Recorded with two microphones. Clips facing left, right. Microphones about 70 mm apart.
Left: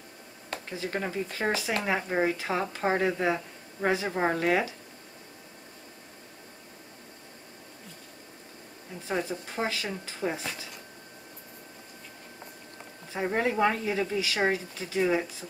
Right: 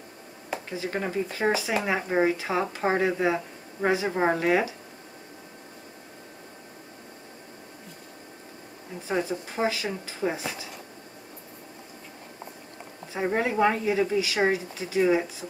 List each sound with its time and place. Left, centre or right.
0.5 s speech: centre
9.1 s speech: centre
13.1 s speech: centre